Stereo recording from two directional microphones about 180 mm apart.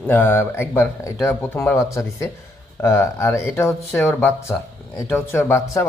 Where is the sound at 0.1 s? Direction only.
10° left (ahead or behind).